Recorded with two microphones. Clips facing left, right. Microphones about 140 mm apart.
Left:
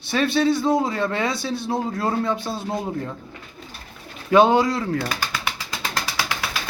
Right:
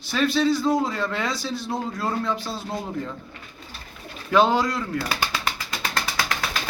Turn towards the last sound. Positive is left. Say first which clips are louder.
# even
turn(degrees=10)  # may be behind; listen again after turning